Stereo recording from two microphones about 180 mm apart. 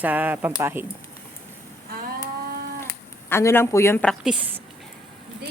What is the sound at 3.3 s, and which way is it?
Speech, 15° left (ahead or behind).